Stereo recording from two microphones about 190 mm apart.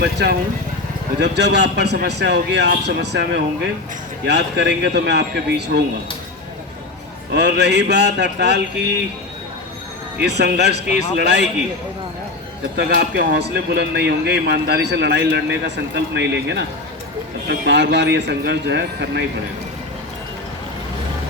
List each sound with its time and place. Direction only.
0.0 s speech: 60° right (ahead or behind)
7.3 s speech: 60° right (ahead or behind)
10.2 s speech: 60° right (ahead or behind)
12.7 s speech: 60° right (ahead or behind)